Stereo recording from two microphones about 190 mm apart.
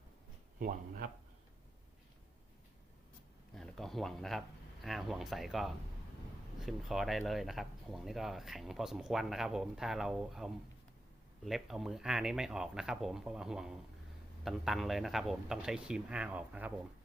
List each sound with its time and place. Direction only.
0.6 s speech: 50° right (ahead or behind)
3.5 s speech: centre (ahead or behind)